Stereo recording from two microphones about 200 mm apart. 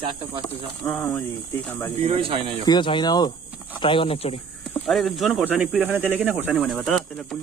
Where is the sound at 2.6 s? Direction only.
20° left (ahead or behind).